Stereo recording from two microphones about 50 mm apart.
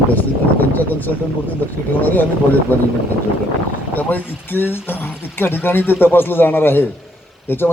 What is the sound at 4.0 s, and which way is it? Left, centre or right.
Speech, left.